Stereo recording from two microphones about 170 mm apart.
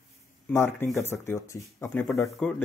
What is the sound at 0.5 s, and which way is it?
A man's voice, 15° left (ahead or behind).